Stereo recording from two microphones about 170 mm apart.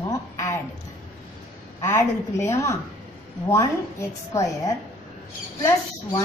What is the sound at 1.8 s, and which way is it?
A woman's voice, 15° left (ahead or behind).